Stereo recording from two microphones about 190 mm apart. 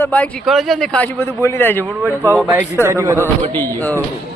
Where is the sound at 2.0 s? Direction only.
10° right (ahead or behind).